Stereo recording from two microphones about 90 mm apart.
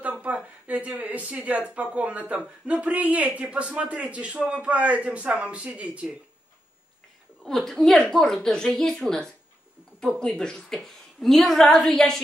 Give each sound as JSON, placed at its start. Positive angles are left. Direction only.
{"t": 0.0, "sound": "a sound", "side_deg": -15}
{"t": 2.0, "sound": "a man's voice", "side_deg": -15}
{"t": 7.4, "sound": "a woman's voice", "side_deg": 5}